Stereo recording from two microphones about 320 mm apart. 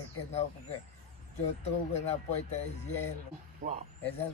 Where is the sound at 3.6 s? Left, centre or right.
Right.